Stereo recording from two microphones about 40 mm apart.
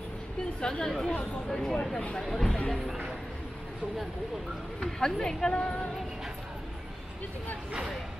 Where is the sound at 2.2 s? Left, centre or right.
Centre.